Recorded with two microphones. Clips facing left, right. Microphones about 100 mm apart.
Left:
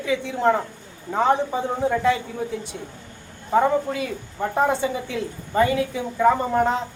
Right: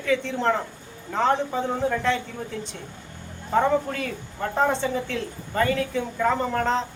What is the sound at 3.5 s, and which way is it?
A woman's voice, 10° left (ahead or behind).